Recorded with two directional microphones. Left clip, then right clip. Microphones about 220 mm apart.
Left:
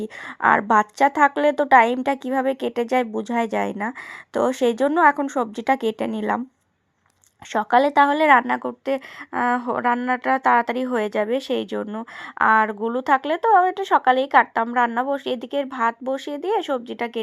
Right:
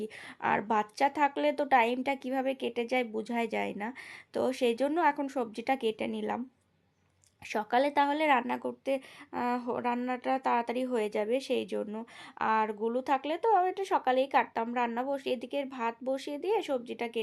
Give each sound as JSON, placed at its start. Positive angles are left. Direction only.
{"t": 0.0, "sound": "a woman's voice", "side_deg": 20}
{"t": 7.5, "sound": "a woman's voice", "side_deg": 20}